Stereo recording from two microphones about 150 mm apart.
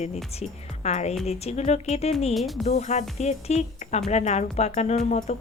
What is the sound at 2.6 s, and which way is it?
A woman's voice, 45° left (ahead or behind).